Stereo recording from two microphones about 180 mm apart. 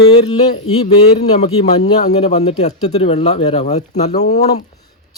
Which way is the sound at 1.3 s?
40° left (ahead or behind).